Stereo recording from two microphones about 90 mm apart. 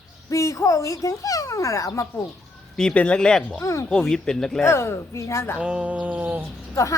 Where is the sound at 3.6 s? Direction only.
35° left (ahead or behind).